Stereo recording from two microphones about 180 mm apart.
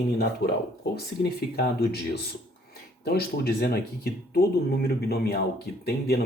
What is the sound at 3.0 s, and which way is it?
Speech, 60° left (ahead or behind).